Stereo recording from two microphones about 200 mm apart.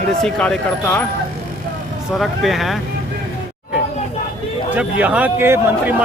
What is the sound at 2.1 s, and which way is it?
Speech, centre (ahead or behind).